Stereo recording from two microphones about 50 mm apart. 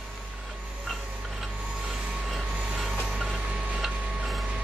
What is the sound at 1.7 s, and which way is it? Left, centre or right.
Train wheels squealing, centre.